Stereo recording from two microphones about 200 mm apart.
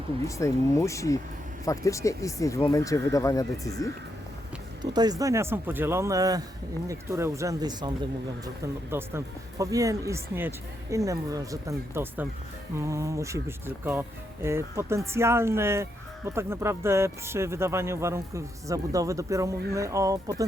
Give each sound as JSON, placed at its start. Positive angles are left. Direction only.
{"t": 0.3, "sound": "speech", "side_deg": 15}
{"t": 4.8, "sound": "speech", "side_deg": -20}
{"t": 14.4, "sound": "speech", "side_deg": -15}